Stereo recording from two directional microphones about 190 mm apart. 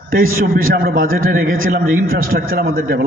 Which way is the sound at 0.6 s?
50° right (ahead or behind).